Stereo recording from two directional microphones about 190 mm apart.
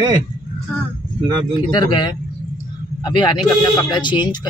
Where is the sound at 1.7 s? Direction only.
20° left (ahead or behind).